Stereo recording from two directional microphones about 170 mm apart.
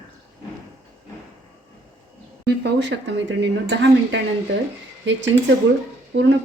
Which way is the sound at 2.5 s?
90° right.